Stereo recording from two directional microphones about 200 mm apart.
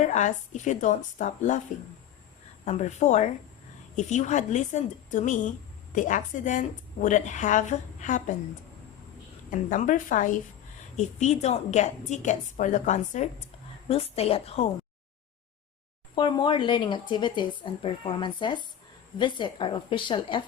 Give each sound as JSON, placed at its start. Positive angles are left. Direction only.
{"t": 0.0, "sound": "speech", "side_deg": 35}
{"t": 2.6, "sound": "speech", "side_deg": 35}
{"t": 9.5, "sound": "speech", "side_deg": 40}
{"t": 16.1, "sound": "speech", "side_deg": 20}